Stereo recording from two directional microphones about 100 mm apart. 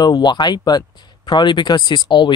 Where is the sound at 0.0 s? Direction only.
50° left (ahead or behind).